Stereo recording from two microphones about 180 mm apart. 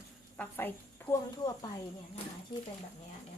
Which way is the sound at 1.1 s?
10° left (ahead or behind).